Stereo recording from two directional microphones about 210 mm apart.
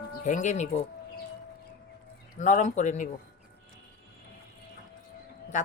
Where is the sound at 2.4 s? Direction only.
35° left (ahead or behind).